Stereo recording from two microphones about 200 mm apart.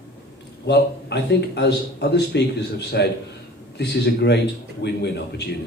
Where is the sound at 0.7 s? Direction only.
55° left (ahead or behind).